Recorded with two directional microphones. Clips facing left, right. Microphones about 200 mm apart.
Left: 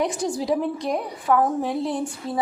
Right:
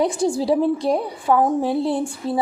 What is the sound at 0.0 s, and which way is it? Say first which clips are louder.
A woman's voice: right 5 dB; 30° right (ahead or behind).